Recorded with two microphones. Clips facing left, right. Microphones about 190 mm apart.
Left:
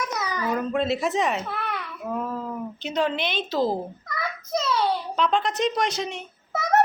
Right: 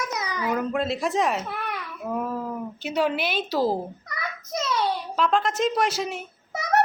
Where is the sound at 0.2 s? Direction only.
15° right (ahead or behind).